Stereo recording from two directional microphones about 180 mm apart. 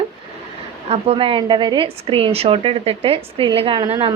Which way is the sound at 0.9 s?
30° right (ahead or behind).